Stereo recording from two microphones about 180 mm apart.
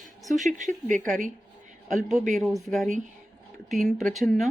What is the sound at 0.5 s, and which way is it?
Speech, 45° right (ahead or behind).